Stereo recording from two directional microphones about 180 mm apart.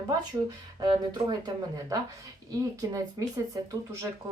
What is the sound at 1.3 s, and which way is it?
Speech, 20° right (ahead or behind).